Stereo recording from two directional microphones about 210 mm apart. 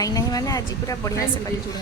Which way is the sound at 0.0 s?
15° left (ahead or behind).